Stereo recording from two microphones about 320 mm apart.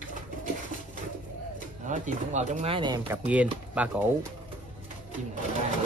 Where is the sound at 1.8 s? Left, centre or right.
Right; by 4.3 s centre.